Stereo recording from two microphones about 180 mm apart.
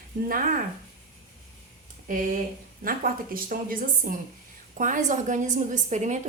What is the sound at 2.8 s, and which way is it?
A woman's voice, 55° right (ahead or behind).